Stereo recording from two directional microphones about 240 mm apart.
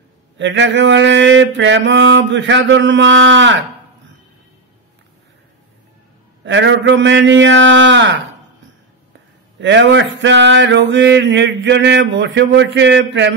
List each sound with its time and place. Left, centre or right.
0.4 s male singing: right
6.4 s male singing: right
9.6 s male singing: right